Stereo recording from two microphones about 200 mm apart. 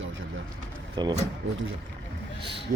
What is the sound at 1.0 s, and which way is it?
Speech, 20° right (ahead or behind).